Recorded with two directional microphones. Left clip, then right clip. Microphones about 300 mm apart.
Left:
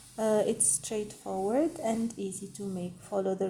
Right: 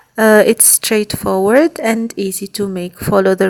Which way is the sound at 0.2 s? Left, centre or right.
Right.